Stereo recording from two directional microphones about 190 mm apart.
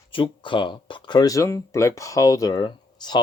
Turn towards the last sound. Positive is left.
turn(degrees=25)  # may be behind; listen again after turning